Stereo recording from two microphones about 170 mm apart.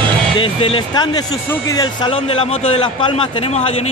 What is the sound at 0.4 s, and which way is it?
A man's voice, 30° left (ahead or behind).